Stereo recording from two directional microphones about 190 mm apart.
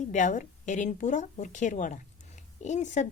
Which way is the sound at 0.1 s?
40° left (ahead or behind).